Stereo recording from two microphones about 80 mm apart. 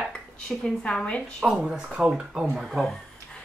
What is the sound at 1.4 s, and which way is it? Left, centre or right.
Speech, centre.